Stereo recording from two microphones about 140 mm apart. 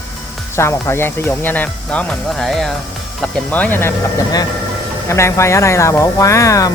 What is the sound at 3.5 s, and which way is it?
Speech, 10° left (ahead or behind).